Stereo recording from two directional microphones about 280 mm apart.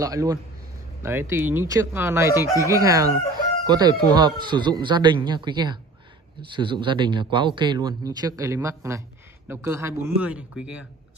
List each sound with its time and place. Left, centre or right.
0.0 s speech: centre
2.3 s speech: centre
2.6 s speech: centre